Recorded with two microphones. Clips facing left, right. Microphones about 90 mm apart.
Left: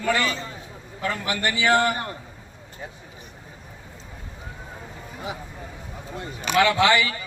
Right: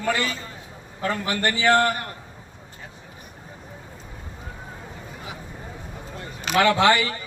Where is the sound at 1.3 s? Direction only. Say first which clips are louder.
Right 2 dB; 45° right (ahead or behind).